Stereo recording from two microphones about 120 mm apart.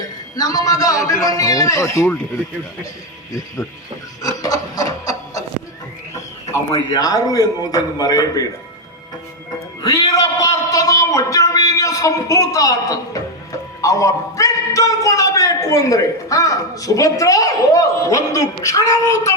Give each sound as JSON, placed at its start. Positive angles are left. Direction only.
{"t": 0.3, "sound": "speech", "side_deg": 30}
{"t": 4.2, "sound": "rub", "side_deg": 30}
{"t": 6.5, "sound": "a man's voice", "side_deg": 30}
{"t": 9.8, "sound": "a sound", "side_deg": 30}
{"t": 13.8, "sound": "a man's voice", "side_deg": 30}